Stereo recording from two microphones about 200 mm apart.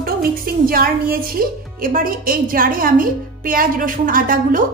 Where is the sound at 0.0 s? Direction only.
45° right (ahead or behind).